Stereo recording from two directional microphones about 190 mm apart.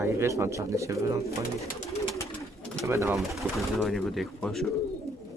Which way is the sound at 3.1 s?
Centre (ahead or behind).